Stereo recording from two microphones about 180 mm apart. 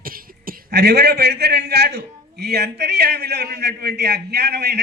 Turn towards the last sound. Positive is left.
turn(degrees=-65)  # may be behind; listen again after turning